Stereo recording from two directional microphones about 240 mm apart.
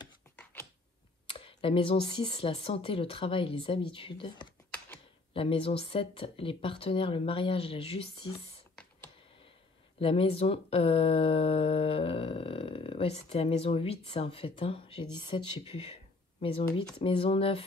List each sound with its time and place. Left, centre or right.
1.2 s speech: left
4.6 s typing: centre
5.3 s speech: left
9.9 s speech: left